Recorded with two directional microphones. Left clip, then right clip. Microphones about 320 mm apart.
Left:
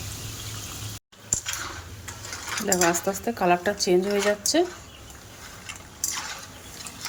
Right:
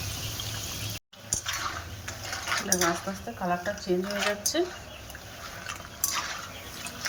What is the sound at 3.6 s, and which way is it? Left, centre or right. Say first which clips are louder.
Speech: left 7 dB; left.